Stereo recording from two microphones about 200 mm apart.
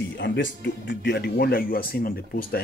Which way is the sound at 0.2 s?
60° left (ahead or behind).